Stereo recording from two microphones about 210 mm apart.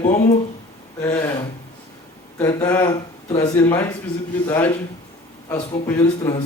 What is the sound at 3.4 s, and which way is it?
A man's voice, 10° left (ahead or behind).